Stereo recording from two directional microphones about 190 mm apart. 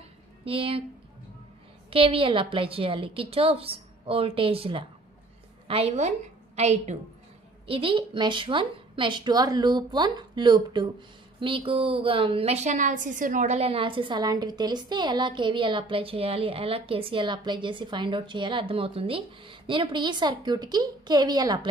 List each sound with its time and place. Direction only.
0.5 s a woman's voice: 30° right (ahead or behind)
1.9 s a woman's voice: 30° right (ahead or behind)